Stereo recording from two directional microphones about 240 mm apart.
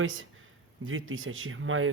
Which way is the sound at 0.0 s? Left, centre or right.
Right.